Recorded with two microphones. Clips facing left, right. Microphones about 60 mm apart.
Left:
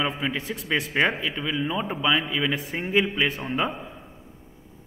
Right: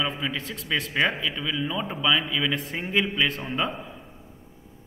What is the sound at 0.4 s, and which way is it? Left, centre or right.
A man's voice, centre.